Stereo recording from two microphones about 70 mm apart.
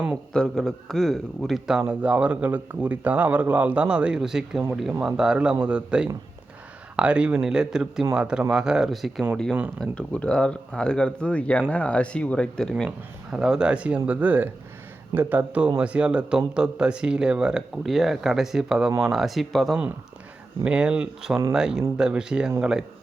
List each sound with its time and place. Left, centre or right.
0.3 s a man's voice: centre
2.0 s speech: centre
9.9 s speech: centre
13.3 s a man's voice: centre
20.7 s speech: centre